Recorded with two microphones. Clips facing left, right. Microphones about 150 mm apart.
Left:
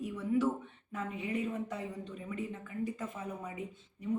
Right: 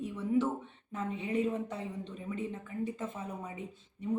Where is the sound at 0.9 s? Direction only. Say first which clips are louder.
Right 2 dB; 30° right (ahead or behind).